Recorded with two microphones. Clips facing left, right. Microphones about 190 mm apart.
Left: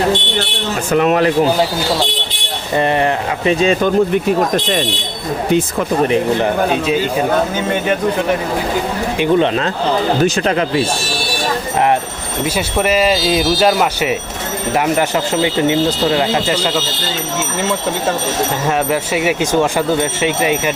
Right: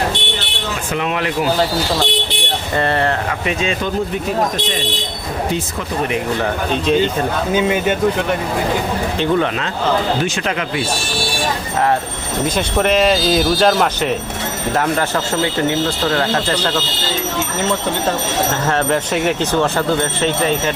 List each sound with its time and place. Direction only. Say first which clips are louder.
0.9 s speech: left 9 dB; 45° left (ahead or behind)
2.7 s speech: left 3 dB; 15° left (ahead or behind)
3.4 s speech: left 9 dB; 35° left (ahead or behind)
6.8 s speech: even; 5° left (ahead or behind)
9.1 s speech: left 4 dB; 15° left (ahead or behind)
10.2 s speech: left 6 dB; 35° left (ahead or behind)
12.5 s speech: even; 5° left (ahead or behind)
18.6 s speech: left 1 dB; 10° left (ahead or behind)